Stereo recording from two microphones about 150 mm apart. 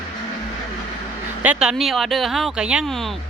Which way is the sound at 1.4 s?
5° right (ahead or behind).